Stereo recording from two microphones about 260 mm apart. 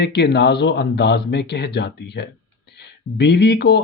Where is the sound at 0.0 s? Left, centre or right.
Left.